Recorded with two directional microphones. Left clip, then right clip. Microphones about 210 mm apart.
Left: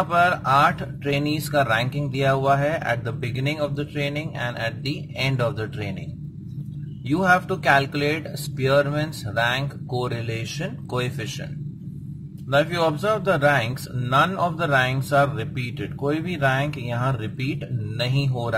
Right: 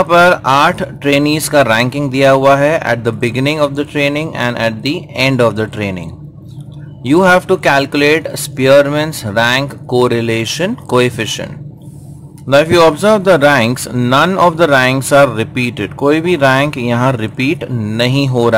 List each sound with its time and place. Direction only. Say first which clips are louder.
0.1 s speech: right 10 dB; 30° right (ahead or behind)
7.1 s speech: right 11 dB; 30° right (ahead or behind)
12.5 s speech: right 13 dB; 30° right (ahead or behind)